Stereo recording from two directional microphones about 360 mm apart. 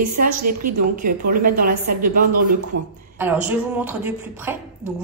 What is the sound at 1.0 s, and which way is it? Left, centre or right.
Speech, right.